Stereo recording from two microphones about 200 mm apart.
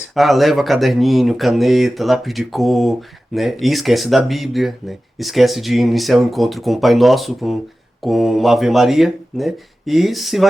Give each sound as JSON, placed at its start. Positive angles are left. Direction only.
{"t": 0.1, "sound": "speech", "side_deg": 0}